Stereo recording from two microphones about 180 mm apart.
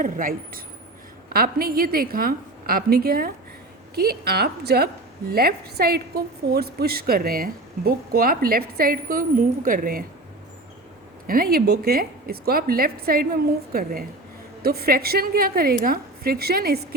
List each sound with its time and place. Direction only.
0.0 s a woman's voice: 50° right (ahead or behind)
11.3 s a woman's voice: 55° right (ahead or behind)